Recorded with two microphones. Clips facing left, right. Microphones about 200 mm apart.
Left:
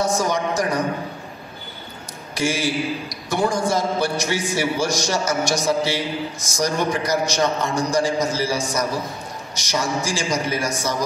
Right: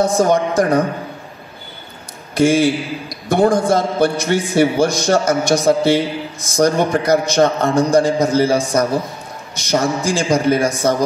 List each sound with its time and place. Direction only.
0.0 s a man's voice: 55° right (ahead or behind)
2.3 s a man's voice: 55° right (ahead or behind)